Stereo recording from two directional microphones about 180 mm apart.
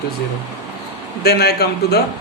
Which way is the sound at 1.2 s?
65° left (ahead or behind).